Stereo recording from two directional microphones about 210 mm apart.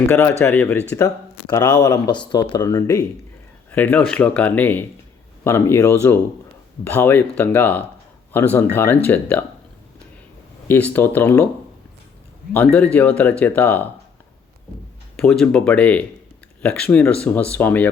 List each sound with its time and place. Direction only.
0.1 s speech: 10° left (ahead or behind)
10.7 s speech: 10° left (ahead or behind)
12.5 s speech: 5° left (ahead or behind)
15.1 s speech: centre (ahead or behind)